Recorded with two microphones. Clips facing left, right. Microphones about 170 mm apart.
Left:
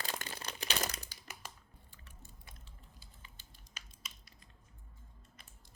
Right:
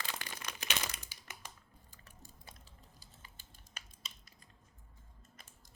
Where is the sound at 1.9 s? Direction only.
40° right (ahead or behind).